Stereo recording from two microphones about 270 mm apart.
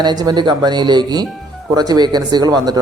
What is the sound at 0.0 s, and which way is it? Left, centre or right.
Speech, centre.